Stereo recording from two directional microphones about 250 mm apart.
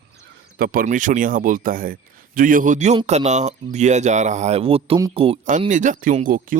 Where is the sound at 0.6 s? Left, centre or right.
Right.